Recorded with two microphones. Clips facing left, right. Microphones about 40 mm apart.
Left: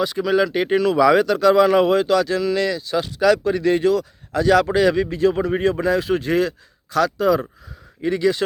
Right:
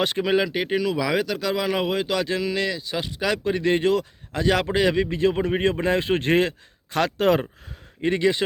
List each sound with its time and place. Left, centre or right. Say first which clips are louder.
0.2 s speech: left 4 dB; right
0.4 s speech: left 5 dB; centre; by 7.4 s right
8.0 s speech: left 2 dB; right